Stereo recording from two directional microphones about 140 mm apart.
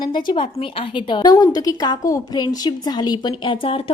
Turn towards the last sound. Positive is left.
turn(degrees=40)  # may be behind; listen again after turning